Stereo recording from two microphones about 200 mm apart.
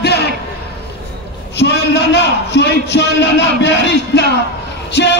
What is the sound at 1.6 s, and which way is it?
A man's voice, 60° left (ahead or behind).